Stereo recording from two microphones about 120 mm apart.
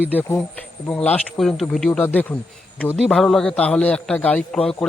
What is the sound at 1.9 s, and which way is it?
A man's voice, 15° left (ahead or behind).